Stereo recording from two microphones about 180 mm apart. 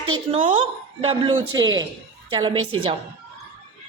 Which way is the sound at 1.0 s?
30° right (ahead or behind).